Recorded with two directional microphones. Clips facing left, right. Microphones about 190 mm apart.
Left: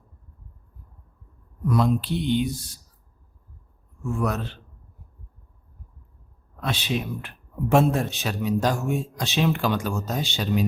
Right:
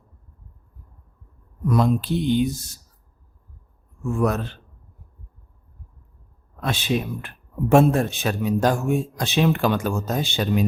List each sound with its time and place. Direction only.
1.7 s speech: 45° right (ahead or behind)
4.2 s speech: 50° right (ahead or behind)
6.6 s speech: 45° right (ahead or behind)